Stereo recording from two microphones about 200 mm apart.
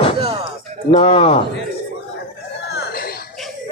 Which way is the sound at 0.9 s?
30° left (ahead or behind).